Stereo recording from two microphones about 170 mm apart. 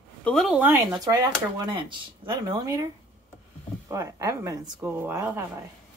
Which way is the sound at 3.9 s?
20° right (ahead or behind).